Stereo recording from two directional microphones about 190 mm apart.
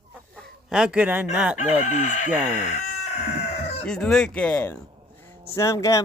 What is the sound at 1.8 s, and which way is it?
Chicken, 40° left (ahead or behind).